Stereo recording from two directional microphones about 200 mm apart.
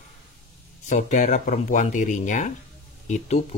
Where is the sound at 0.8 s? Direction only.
40° left (ahead or behind).